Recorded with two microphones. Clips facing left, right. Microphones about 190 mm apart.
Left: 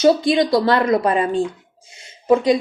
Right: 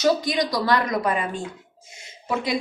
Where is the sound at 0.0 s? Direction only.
25° left (ahead or behind).